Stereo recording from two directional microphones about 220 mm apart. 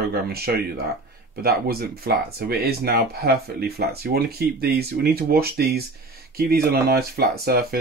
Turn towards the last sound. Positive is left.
turn(degrees=-45)  # may be behind; listen again after turning